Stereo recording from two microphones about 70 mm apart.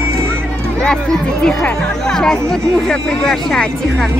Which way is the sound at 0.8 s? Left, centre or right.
Centre.